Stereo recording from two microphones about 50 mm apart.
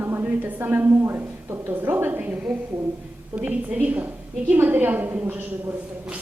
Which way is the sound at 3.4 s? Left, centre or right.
Right.